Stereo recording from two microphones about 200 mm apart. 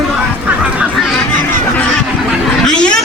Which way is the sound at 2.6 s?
5° left (ahead or behind).